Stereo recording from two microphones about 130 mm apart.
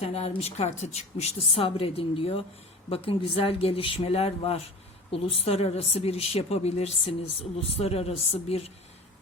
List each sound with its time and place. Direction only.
0.0 s a woman's voice: 55° left (ahead or behind)